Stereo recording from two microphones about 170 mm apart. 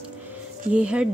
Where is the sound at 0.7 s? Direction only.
5° right (ahead or behind).